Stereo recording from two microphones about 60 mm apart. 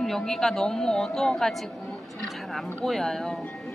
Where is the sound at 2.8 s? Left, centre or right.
Centre.